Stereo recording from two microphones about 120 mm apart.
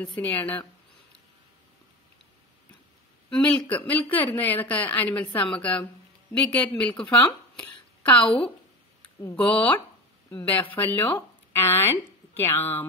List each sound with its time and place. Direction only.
0.0 s speech: 15° left (ahead or behind)
3.3 s speech: 10° left (ahead or behind)
7.5 s a sound: 15° left (ahead or behind)
8.3 s speech: 15° left (ahead or behind)